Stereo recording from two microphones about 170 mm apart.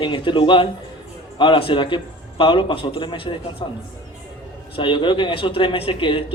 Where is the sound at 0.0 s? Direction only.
30° left (ahead or behind).